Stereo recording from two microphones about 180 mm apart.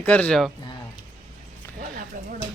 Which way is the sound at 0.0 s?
10° left (ahead or behind).